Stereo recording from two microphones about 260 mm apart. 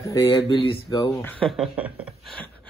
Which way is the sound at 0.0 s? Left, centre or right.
Centre.